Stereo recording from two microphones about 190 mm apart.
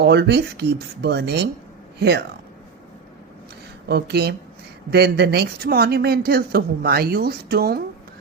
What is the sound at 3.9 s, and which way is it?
Speech, 60° right (ahead or behind).